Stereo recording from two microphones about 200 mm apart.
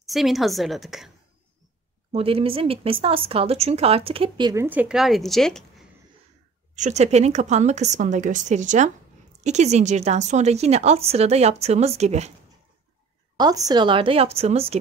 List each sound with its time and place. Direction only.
0.0 s a woman's voice: centre (ahead or behind)
2.1 s speech: 30° right (ahead or behind)
4.6 s a woman's voice: 5° right (ahead or behind)
6.7 s speech: 35° right (ahead or behind)
13.4 s speech: 20° right (ahead or behind)